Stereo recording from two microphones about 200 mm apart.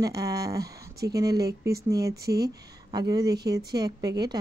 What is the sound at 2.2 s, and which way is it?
Speech, 50° right (ahead or behind).